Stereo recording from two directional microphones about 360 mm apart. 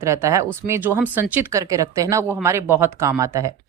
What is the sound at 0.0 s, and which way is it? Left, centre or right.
Speech, centre.